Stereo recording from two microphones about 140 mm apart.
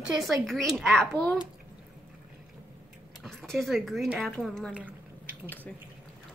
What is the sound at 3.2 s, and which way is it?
Speech, 5° left (ahead or behind).